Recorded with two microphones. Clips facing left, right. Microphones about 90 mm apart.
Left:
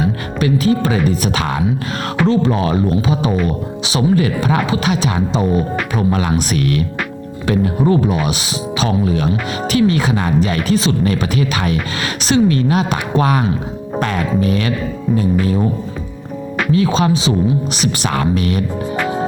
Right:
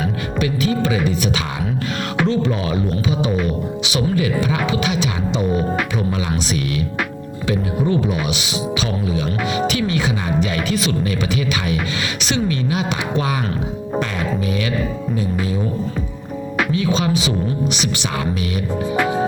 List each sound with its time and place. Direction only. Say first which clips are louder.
0.4 s music: left 5 dB; 40° left (ahead or behind)
2.3 s music: left 5 dB; 40° left (ahead or behind)
3.8 s speech: left 5 dB; 40° left (ahead or behind)
7.5 s a woman's voice: left 5 dB; 45° left (ahead or behind)
9.7 s speech: left 6 dB; 40° left (ahead or behind)
12.3 s a woman's voice: left 8 dB; 40° left (ahead or behind)
16.7 s speech: left 6 dB; 40° left (ahead or behind)
18.2 s a woman's voice: left 7 dB; 45° left (ahead or behind)